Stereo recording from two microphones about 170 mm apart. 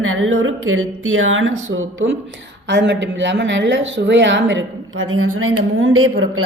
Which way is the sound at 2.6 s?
90° right.